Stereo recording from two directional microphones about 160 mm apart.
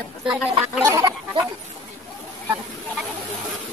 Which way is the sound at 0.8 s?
20° right (ahead or behind).